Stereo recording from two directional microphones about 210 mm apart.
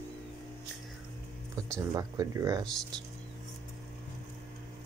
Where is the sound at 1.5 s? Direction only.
15° right (ahead or behind).